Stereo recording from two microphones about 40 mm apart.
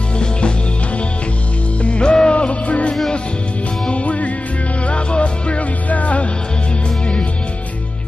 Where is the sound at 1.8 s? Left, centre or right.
Left.